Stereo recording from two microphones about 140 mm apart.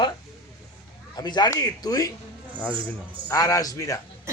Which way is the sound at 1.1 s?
30° left (ahead or behind).